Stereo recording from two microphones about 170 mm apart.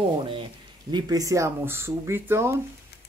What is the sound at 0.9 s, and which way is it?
Speech, 20° right (ahead or behind).